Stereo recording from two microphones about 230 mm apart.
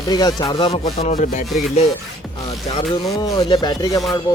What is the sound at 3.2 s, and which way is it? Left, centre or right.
Speech, centre.